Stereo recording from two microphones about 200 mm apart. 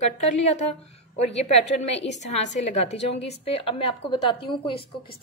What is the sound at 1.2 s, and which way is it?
Speech, 35° left (ahead or behind).